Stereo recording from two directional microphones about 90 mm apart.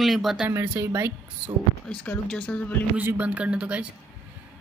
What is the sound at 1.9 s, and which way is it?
Speech, 10° left (ahead or behind).